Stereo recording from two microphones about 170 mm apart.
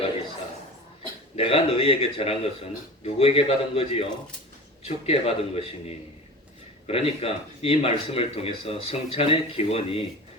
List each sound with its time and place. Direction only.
1.4 s speech: 35° left (ahead or behind)